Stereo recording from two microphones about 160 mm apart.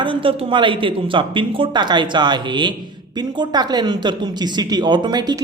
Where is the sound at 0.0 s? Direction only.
30° right (ahead or behind).